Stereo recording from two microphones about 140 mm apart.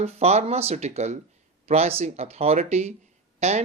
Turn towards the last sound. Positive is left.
turn(degrees=-55)  # may be behind; listen again after turning